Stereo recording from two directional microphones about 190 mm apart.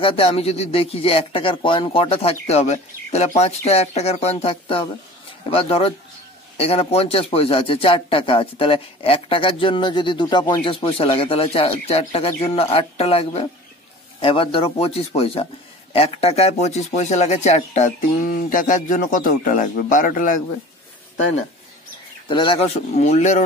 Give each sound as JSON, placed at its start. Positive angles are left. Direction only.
{"t": 0.0, "sound": "a man's voice", "side_deg": 30}
{"t": 22.3, "sound": "speech", "side_deg": 25}